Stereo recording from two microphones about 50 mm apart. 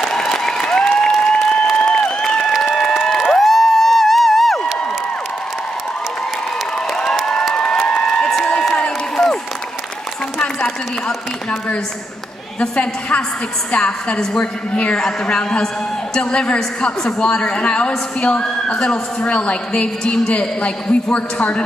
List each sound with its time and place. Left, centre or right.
0.0 s applause: centre
3.1 s crowd: centre
6.9 s a sound: centre
12.5 s a woman's voice: left